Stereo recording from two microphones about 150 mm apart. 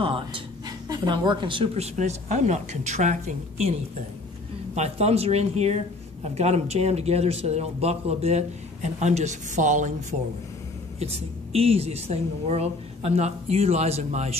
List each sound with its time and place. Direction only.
0.0 s a sound: 35° right (ahead or behind)
0.7 s speech: 30° right (ahead or behind)
2.0 s a man's voice: 50° right (ahead or behind)
4.7 s a man's voice: 45° right (ahead or behind)
11.0 s a man's voice: 40° right (ahead or behind)